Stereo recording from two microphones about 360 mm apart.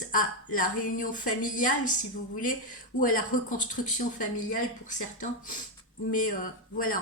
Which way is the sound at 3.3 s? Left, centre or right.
Left.